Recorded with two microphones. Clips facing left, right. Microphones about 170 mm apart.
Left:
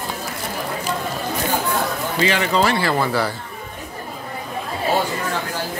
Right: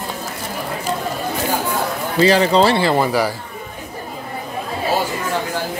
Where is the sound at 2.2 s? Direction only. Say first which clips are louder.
Right 6 dB; 35° right (ahead or behind).